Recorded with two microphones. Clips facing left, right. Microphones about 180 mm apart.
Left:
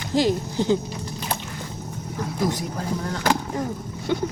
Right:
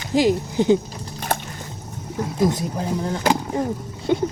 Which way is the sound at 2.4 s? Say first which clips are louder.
Right 5 dB; 20° right (ahead or behind).